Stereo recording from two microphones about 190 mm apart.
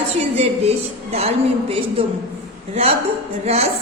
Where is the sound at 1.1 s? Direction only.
30° right (ahead or behind).